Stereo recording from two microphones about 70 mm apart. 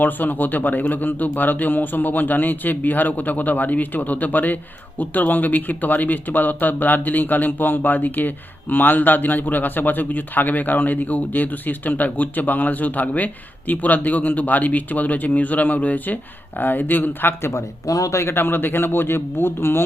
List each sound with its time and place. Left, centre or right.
0.0 s a man's voice: left
17.5 s a man's voice: left